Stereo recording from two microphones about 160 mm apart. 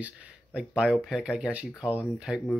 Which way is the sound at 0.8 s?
5° right (ahead or behind).